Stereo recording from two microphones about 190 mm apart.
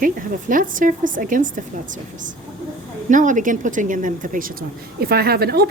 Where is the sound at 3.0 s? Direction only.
40° right (ahead or behind); by 5.7 s 55° right (ahead or behind).